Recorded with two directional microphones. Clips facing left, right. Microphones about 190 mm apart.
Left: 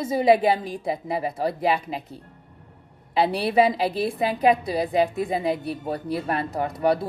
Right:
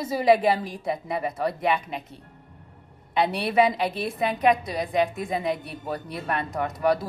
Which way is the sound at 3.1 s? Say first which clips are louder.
Left 2 dB; 30° left (ahead or behind).